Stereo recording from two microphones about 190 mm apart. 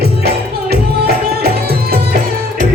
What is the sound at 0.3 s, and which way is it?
Music, 55° right (ahead or behind).